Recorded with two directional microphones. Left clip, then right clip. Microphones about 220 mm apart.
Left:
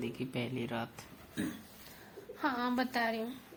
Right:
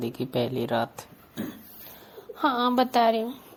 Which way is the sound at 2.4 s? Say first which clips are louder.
Right 11 dB; 30° right (ahead or behind).